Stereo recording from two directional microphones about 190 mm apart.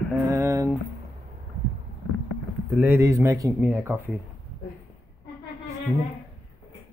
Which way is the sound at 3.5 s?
Centre (ahead or behind).